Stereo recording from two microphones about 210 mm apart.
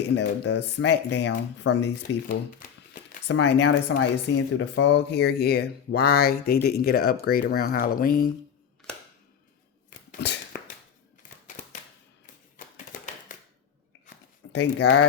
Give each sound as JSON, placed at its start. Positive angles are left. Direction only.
{"t": 0.2, "sound": "speech", "side_deg": 55}
{"t": 3.2, "sound": "speech", "side_deg": 55}
{"t": 10.2, "sound": "a sound", "side_deg": 55}
{"t": 11.2, "sound": "typewriter", "side_deg": 35}
{"t": 12.5, "sound": "tap", "side_deg": 40}
{"t": 14.5, "sound": "speech", "side_deg": 55}